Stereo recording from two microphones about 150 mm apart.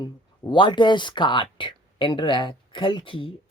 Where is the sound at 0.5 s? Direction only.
30° left (ahead or behind).